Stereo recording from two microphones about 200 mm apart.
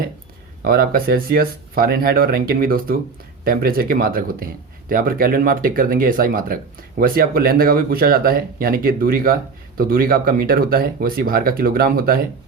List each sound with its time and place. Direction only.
0.6 s speech: 45° right (ahead or behind)